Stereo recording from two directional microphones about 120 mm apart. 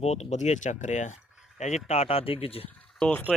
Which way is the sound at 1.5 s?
75° left (ahead or behind).